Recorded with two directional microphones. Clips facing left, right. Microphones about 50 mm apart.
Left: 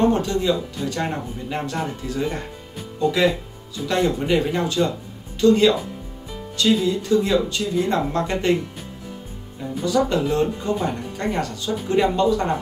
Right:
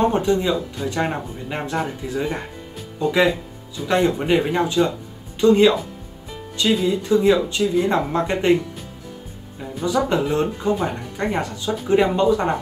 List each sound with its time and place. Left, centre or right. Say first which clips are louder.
0.0 s speech: right 1 dB; centre
10.0 s speech: even; centre